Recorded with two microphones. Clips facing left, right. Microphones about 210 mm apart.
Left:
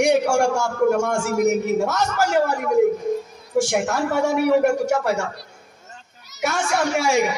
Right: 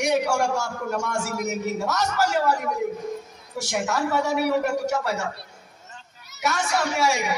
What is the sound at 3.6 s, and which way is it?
A man's voice, 50° left (ahead or behind).